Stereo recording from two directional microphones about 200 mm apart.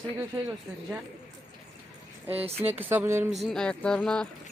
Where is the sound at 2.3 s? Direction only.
30° right (ahead or behind).